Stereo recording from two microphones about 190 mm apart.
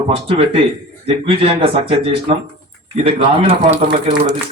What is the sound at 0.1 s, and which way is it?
Speech, 30° right (ahead or behind).